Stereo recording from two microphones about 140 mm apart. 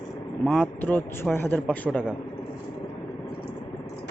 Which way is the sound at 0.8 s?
15° left (ahead or behind).